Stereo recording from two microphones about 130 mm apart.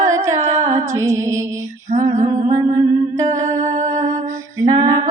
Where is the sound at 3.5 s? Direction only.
70° right (ahead or behind).